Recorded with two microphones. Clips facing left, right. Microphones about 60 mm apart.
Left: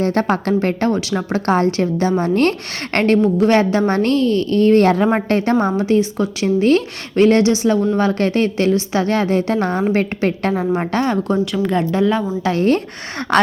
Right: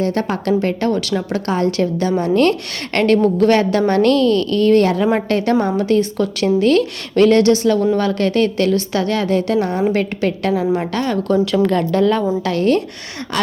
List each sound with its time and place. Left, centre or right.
0.0 s a woman's voice: left
0.9 s a woman's voice: left
3.2 s a woman's voice: centre
3.5 s a woman's voice: left
11.5 s a woman's voice: centre
12.4 s a woman's voice: left
13.3 s speech: left